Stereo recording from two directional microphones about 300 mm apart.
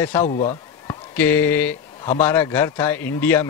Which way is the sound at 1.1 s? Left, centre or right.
Centre.